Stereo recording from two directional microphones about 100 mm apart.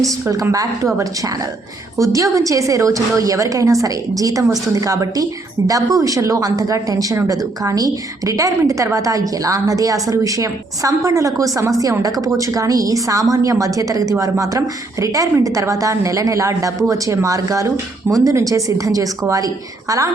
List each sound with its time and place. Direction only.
0.3 s speech: 35° right (ahead or behind)
2.0 s speech: 35° right (ahead or behind)